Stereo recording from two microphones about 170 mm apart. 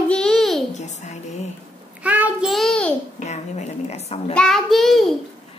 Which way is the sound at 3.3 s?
40° left (ahead or behind).